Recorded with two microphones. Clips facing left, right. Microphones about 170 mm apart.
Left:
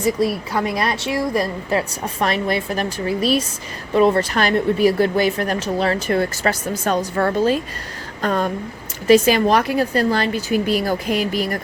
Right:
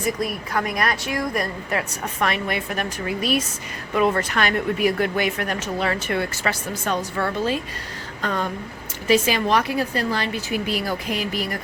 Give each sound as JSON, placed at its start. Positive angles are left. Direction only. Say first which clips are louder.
{"t": 0.2, "sound": "speech", "louder": "left 5 dB", "side_deg": 30}